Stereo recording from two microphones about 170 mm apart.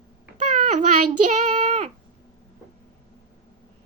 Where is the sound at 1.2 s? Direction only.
45° right (ahead or behind).